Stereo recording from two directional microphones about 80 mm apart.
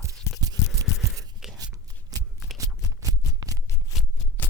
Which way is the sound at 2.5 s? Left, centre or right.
Right.